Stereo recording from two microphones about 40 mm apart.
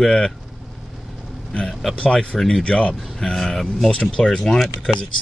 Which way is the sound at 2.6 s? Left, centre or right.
Left.